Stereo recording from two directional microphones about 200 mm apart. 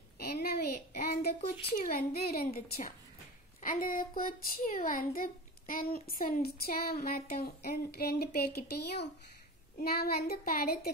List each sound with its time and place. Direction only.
0.2 s a child's voice: 50° left (ahead or behind)